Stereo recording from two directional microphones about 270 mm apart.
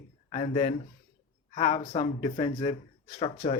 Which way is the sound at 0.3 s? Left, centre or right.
Left.